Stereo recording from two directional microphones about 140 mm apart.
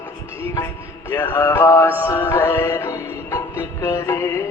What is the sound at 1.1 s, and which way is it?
Mantra, 20° left (ahead or behind).